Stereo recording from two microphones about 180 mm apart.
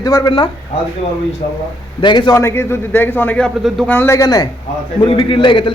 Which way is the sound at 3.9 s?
15° left (ahead or behind).